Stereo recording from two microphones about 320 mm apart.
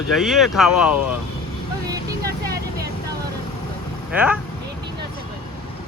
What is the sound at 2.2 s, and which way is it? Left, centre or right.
Vehicle, right.